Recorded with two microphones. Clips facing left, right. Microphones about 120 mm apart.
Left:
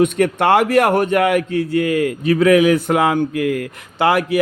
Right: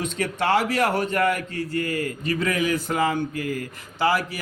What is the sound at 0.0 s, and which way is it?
A man's voice, 60° left (ahead or behind).